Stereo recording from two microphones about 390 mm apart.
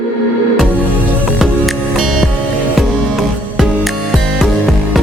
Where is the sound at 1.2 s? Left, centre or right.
Centre.